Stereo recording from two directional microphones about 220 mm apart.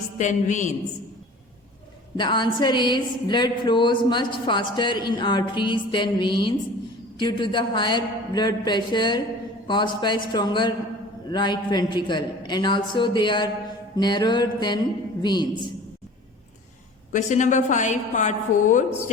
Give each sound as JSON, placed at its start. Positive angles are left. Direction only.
{"t": 0.2, "sound": "a woman's voice", "side_deg": 35}
{"t": 2.1, "sound": "a sound", "side_deg": 20}
{"t": 17.1, "sound": "a woman's voice", "side_deg": 35}